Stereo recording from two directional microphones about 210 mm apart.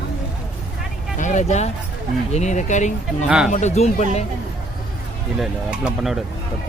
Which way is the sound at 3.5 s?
35° left (ahead or behind).